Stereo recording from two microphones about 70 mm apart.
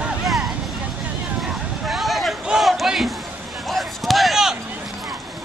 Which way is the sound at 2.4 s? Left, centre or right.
Centre.